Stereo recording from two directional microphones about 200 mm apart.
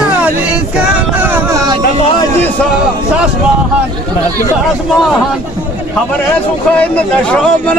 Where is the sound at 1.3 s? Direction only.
15° right (ahead or behind).